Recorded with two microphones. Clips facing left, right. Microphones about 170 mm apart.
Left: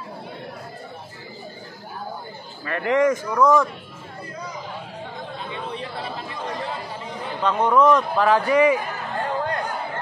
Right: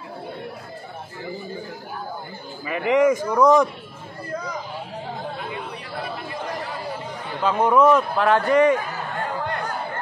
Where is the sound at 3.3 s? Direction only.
20° right (ahead or behind).